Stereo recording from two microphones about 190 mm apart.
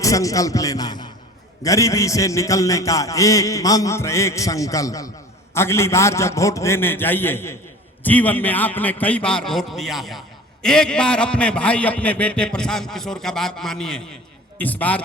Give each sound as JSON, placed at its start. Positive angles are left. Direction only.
{"t": 0.0, "sound": "a man's voice", "side_deg": 15}